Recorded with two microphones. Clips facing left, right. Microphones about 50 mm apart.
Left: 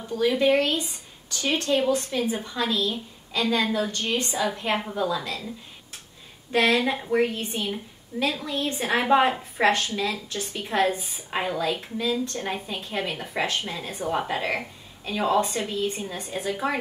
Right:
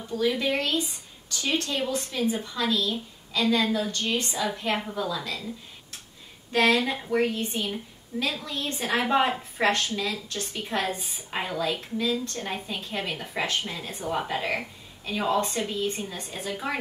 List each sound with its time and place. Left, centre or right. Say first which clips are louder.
0.3 s a woman's voice: left 9 dB; centre
1.9 s a woman's voice: left 3 dB; centre
6.5 s a woman's voice: left 1 dB; centre
7.2 s a woman's voice: even; centre
10.4 s a woman's voice: left 6 dB; centre